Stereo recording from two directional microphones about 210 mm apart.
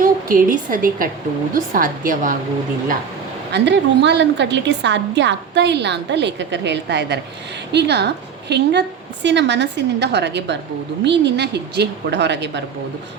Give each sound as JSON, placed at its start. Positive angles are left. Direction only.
{"t": 0.0, "sound": "a woman's voice", "side_deg": -40}
{"t": 3.5, "sound": "a woman's voice", "side_deg": -55}